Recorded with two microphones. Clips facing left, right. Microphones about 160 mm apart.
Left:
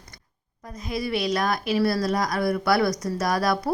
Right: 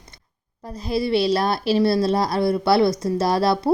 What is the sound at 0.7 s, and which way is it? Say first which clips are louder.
A woman's voice: right 6 dB; 30° right (ahead or behind).